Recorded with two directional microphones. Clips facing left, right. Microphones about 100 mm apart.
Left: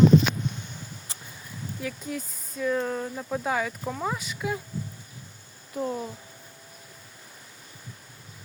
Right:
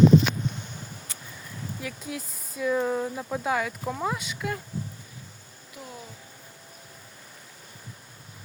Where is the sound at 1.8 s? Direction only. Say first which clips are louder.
Left 4 dB; centre (ahead or behind).